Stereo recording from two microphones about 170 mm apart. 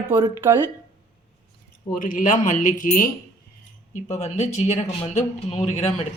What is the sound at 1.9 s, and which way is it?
Speech, 50° left (ahead or behind).